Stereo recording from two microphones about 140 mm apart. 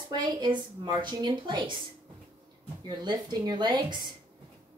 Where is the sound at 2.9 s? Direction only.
30° right (ahead or behind).